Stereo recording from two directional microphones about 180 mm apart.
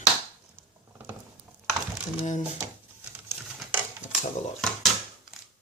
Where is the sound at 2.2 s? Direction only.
45° left (ahead or behind).